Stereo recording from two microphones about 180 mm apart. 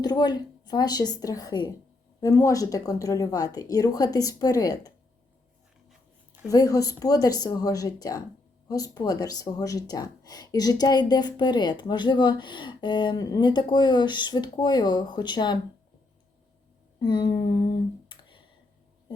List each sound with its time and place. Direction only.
0.0 s speech: 20° left (ahead or behind)
6.5 s speech: 20° left (ahead or behind)
17.0 s speech: 25° left (ahead or behind)